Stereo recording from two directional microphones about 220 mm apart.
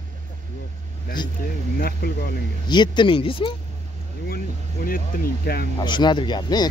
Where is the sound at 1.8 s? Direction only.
45° left (ahead or behind).